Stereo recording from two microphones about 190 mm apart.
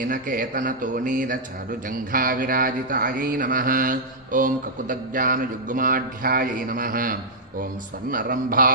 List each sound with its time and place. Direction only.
0.0 s mantra: 45° right (ahead or behind)